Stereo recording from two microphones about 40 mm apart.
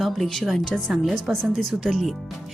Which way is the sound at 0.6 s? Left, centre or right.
Centre.